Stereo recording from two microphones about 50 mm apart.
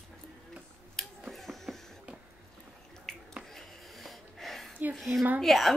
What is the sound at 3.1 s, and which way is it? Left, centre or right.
Finger snapping, centre.